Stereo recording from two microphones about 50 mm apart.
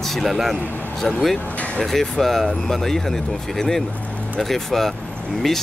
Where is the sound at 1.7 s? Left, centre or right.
Centre.